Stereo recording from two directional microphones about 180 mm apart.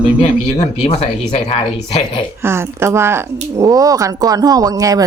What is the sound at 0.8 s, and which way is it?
Speech, 35° left (ahead or behind).